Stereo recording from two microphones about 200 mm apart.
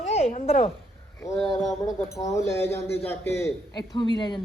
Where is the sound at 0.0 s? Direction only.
35° left (ahead or behind).